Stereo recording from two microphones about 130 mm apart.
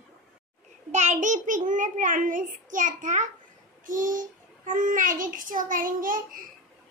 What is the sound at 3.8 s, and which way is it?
A child's voice, 90° right.